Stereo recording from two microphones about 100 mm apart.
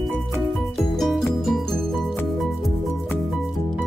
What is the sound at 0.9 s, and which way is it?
Music, centre (ahead or behind).